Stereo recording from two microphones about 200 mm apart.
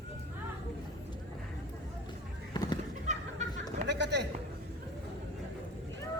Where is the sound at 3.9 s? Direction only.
60° right (ahead or behind).